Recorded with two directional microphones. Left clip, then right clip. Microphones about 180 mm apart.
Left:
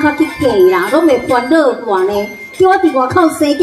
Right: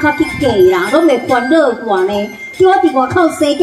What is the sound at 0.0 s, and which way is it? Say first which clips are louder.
Speech: even; 15° left (ahead or behind).